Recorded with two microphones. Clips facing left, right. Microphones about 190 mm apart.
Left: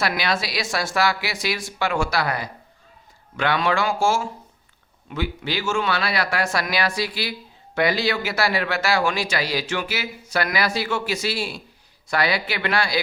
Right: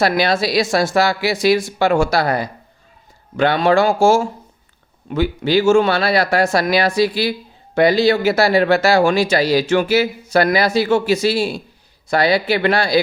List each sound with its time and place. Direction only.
0.0 s a man's voice: 30° right (ahead or behind)